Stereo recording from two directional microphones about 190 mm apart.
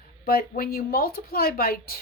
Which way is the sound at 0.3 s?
50° left (ahead or behind).